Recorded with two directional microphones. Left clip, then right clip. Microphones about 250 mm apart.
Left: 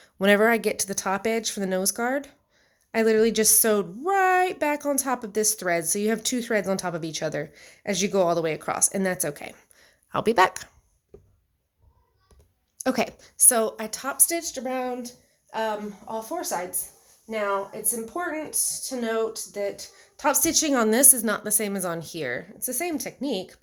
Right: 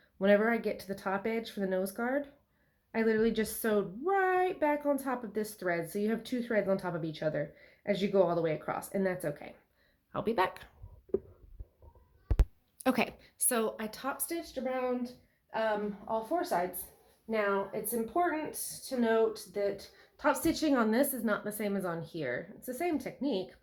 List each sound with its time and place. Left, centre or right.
0.0 s a woman's voice: left
12.8 s a woman's voice: centre; by 16.6 s left
18.1 s a woman's voice: left